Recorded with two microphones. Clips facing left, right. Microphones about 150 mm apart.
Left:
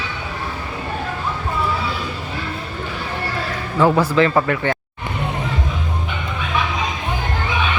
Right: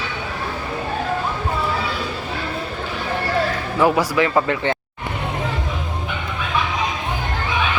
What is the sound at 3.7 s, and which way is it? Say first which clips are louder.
A man's voice: left 2 dB; 10° right (ahead or behind).